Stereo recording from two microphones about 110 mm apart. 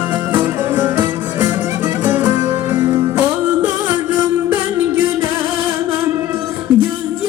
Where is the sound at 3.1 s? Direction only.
15° right (ahead or behind).